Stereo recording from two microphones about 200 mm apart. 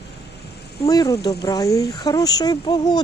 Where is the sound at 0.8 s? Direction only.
20° left (ahead or behind).